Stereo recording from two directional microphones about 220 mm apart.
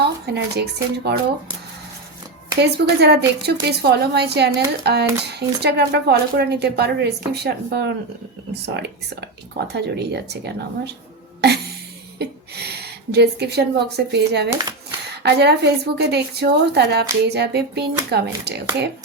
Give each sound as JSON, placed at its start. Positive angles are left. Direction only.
{"t": 0.0, "sound": "speech", "side_deg": -50}
{"t": 2.6, "sound": "speech", "side_deg": -50}
{"t": 9.6, "sound": "speech", "side_deg": -50}
{"t": 11.3, "sound": "a sound", "side_deg": -50}
{"t": 12.2, "sound": "a woman's voice", "side_deg": -50}